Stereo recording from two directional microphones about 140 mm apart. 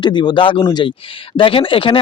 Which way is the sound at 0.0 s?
35° left (ahead or behind).